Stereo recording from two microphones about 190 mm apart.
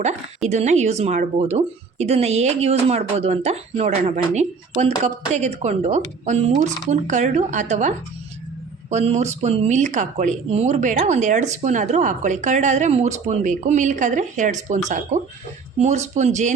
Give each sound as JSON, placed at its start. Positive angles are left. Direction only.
{"t": 0.4, "sound": "a woman's voice", "side_deg": -35}